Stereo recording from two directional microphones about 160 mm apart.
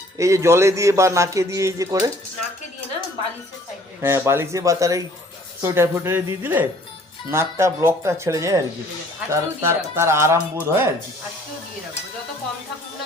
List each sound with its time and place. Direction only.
0.2 s speech: 20° right (ahead or behind)
4.0 s speech: 15° right (ahead or behind)